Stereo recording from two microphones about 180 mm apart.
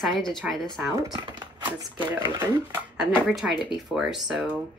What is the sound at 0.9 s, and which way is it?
Speech, 20° right (ahead or behind).